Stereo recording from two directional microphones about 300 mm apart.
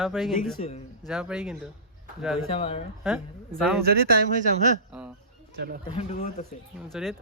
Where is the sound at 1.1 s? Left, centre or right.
Centre.